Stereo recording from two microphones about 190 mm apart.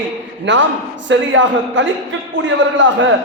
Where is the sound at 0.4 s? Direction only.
75° right (ahead or behind).